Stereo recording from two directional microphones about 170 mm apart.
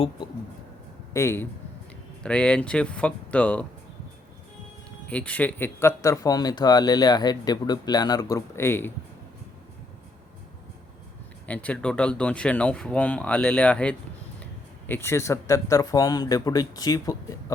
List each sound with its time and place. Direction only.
1.1 s speech: 15° left (ahead or behind)
5.0 s speech: 10° left (ahead or behind)
11.4 s speech: 10° left (ahead or behind)